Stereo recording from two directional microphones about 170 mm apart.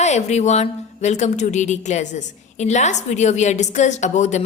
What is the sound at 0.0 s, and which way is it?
A woman's voice, 40° left (ahead or behind).